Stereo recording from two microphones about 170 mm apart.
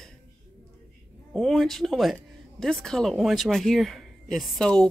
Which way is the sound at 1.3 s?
Centre (ahead or behind).